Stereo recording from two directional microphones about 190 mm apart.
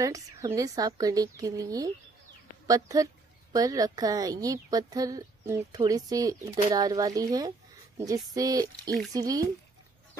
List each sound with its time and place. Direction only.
0.0 s a woman's voice: 20° right (ahead or behind)